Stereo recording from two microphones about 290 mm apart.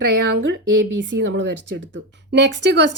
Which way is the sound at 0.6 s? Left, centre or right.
Right.